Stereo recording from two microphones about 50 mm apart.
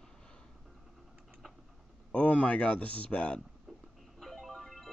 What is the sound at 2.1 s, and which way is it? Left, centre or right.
Speech, left.